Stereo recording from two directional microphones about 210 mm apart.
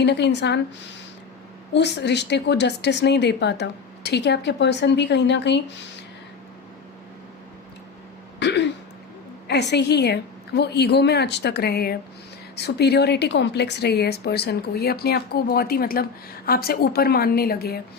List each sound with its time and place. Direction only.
0.0 s a woman's voice: 55° left (ahead or behind)
1.7 s a woman's voice: 55° left (ahead or behind)
8.4 s throat clearing: 55° left (ahead or behind)
9.5 s a woman's voice: 55° left (ahead or behind)